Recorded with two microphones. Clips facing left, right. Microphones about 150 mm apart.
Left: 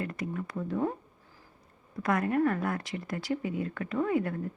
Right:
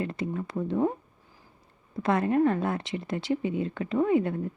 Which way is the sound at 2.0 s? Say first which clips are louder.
Right 3 dB; 25° right (ahead or behind).